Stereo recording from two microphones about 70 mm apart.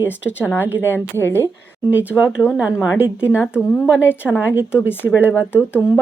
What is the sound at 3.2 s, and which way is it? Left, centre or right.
Speech, left.